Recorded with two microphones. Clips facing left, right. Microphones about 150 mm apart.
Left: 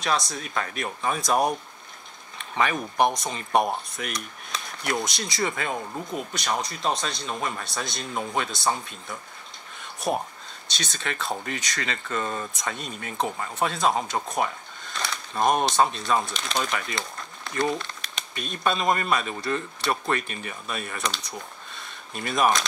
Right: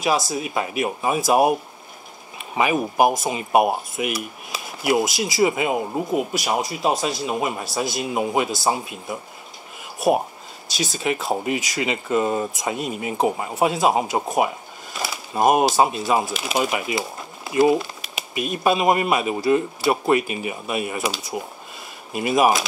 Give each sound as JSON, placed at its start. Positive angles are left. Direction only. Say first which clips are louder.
{"t": 0.0, "sound": "speech", "louder": "right 5 dB", "side_deg": -5}
{"t": 2.3, "sound": "a sound", "louder": "right 5 dB", "side_deg": -10}
{"t": 3.0, "sound": "speech", "louder": "right 3 dB", "side_deg": -5}
{"t": 9.9, "sound": "a sound", "louder": "right 8 dB", "side_deg": -5}
{"t": 10.8, "sound": "speech", "louder": "right 8 dB", "side_deg": -5}
{"t": 13.3, "sound": "speech", "louder": "right 6 dB", "side_deg": -20}
{"t": 13.6, "sound": "speech", "louder": "right 5 dB", "side_deg": -5}